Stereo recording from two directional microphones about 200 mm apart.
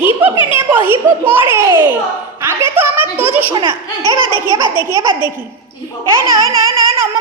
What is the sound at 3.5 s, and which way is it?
Speech, 25° right (ahead or behind).